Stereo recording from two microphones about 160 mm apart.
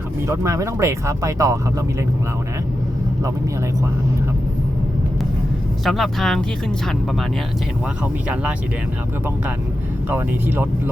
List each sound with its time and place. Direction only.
0.3 s speech: 20° right (ahead or behind)
5.8 s speech: centre (ahead or behind)
10.1 s speech: 10° right (ahead or behind)